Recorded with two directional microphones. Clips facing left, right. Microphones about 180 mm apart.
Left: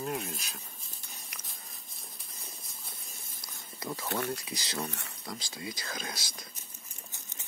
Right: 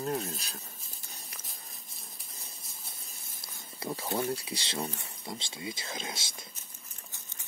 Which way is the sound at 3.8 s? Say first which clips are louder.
Right 2 dB; 30° right (ahead or behind).